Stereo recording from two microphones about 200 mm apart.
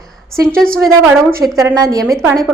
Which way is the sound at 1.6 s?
15° right (ahead or behind).